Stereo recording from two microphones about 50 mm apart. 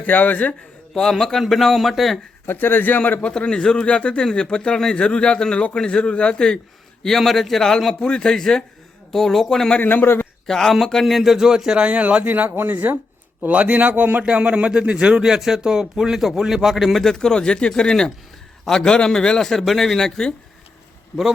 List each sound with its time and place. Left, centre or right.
0.0 s speech: left
0.9 s speech: centre
2.5 s speech: left
3.2 s a man's voice: centre
9.6 s a man's voice: left
9.9 s a man's voice: left
10.4 s a man's voice: centre
11.0 s speech: centre
11.8 s speech: right
13.5 s speech: right
14.3 s speech: right; by 17.0 s centre
17.0 s a man's voice: centre